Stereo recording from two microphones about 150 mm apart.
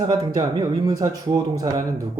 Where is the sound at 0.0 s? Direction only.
25° right (ahead or behind).